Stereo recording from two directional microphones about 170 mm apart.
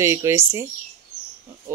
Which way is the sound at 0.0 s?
15° right (ahead or behind).